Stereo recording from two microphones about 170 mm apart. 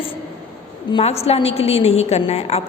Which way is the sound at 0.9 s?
35° left (ahead or behind).